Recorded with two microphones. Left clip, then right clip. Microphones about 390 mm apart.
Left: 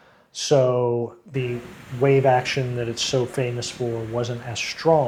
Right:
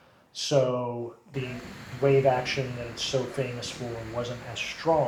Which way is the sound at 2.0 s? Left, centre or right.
Left.